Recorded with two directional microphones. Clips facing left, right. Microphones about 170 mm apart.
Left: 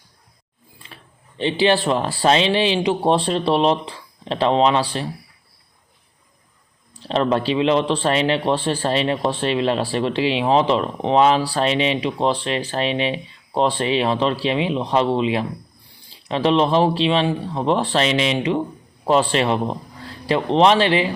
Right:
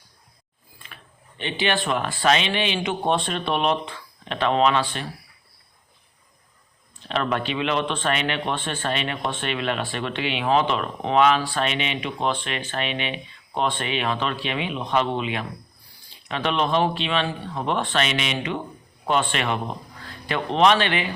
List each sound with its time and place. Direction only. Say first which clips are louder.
1.4 s a man's voice: left 7 dB; 30° left (ahead or behind)
6.9 s a man's voice: left 6 dB; 35° left (ahead or behind)